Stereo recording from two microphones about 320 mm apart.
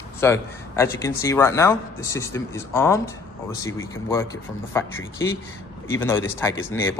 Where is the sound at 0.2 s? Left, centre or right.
Centre.